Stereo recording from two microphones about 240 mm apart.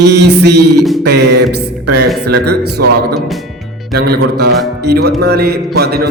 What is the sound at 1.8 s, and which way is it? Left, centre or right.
Speech, right.